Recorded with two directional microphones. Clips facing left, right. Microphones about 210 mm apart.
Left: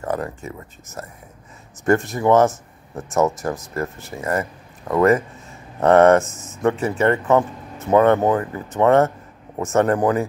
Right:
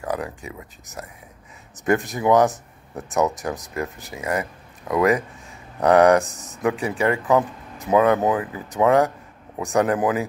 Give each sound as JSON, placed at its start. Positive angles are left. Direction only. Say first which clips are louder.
{"t": 0.0, "sound": "speech", "louder": "left 2 dB", "side_deg": 0}
{"t": 0.5, "sound": "speech", "louder": "left 2 dB", "side_deg": -15}
{"t": 1.9, "sound": "speech", "louder": "left 2 dB", "side_deg": 0}
{"t": 4.1, "sound": "speech", "louder": "left 2 dB", "side_deg": -15}
{"t": 4.8, "sound": "speech", "louder": "left 3 dB", "side_deg": 0}